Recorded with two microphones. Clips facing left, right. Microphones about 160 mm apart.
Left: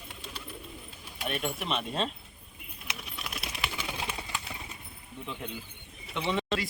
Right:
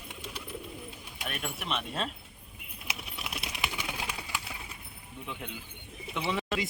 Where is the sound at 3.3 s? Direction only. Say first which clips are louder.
Even; 15° right (ahead or behind).